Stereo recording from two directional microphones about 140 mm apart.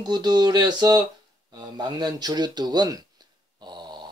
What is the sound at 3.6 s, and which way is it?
Dog, 30° right (ahead or behind).